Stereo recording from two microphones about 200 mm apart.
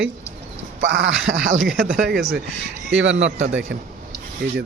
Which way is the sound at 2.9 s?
70° right (ahead or behind).